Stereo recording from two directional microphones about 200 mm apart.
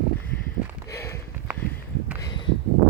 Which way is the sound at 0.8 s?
15° left (ahead or behind).